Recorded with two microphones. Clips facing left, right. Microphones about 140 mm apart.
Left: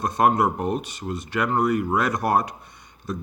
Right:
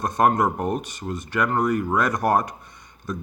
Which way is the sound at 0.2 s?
45° right (ahead or behind).